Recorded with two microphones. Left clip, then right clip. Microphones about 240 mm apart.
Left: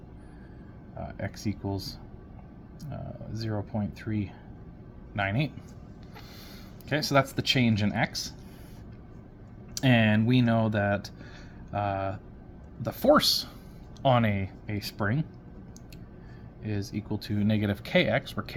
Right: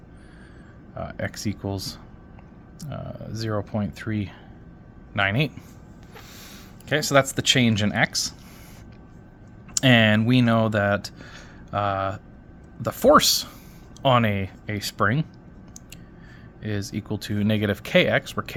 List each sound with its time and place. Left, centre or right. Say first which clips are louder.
0.9 s speech: right 7 dB; right
9.7 s speech: right 7 dB; right
16.9 s speech: right 4 dB; right